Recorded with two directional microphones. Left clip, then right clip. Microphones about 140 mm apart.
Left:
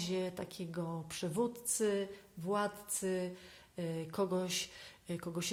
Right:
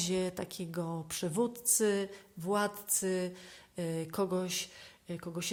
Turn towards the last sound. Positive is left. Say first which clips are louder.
# right 1 dB
turn(degrees=-10)  # may be behind; listen again after turning